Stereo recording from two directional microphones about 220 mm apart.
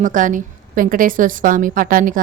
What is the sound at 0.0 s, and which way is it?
A woman's voice, 35° right (ahead or behind).